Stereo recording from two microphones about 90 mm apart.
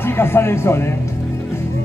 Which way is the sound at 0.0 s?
25° left (ahead or behind).